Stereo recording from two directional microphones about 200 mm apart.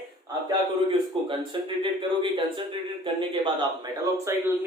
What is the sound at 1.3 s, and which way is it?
Speech, 25° right (ahead or behind).